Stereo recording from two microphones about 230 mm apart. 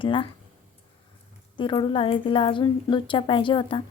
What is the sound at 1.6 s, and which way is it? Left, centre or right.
Speech, left.